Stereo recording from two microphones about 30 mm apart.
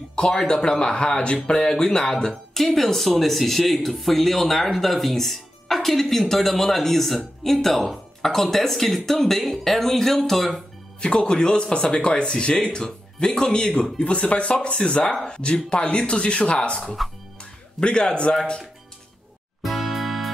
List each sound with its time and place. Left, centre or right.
0.1 s speech: left
2.5 s speech: centre
11.0 s speech: left
14.3 s speech: left
19.6 s music: centre